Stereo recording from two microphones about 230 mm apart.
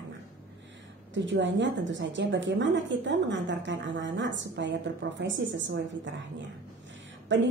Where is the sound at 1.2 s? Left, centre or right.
Right.